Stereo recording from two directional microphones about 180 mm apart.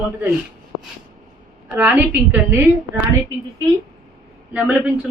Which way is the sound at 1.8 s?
10° right (ahead or behind).